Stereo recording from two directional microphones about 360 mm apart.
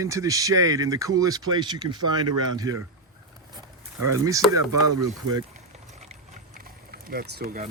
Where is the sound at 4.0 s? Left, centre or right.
Centre.